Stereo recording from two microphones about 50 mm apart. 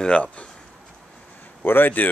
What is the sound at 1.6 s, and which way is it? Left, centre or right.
Speech, left.